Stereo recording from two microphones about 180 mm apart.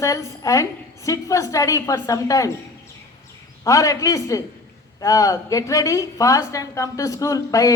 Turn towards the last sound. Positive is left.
turn(degrees=20)  # may be behind; listen again after turning